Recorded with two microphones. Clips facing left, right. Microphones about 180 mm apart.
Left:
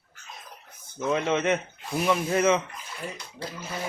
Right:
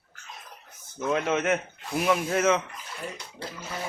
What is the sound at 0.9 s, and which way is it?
Speech, centre (ahead or behind).